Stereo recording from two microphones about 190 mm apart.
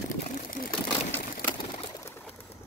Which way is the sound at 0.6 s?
40° left (ahead or behind).